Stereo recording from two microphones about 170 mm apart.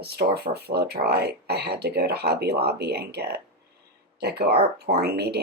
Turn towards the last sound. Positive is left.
turn(degrees=-70)  # may be behind; listen again after turning